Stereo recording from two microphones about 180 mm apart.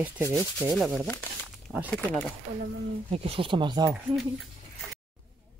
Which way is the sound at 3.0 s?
35° right (ahead or behind).